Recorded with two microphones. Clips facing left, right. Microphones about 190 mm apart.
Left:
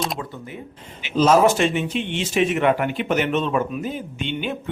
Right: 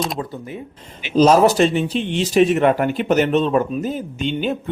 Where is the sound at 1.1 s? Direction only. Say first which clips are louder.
Right 3 dB; 40° right (ahead or behind).